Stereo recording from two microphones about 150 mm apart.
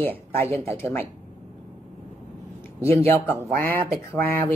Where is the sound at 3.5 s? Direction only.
70° right (ahead or behind).